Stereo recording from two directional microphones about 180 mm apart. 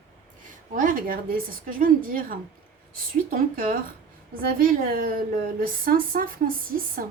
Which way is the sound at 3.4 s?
50° right (ahead or behind).